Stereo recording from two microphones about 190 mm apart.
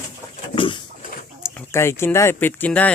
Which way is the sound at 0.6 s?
25° left (ahead or behind).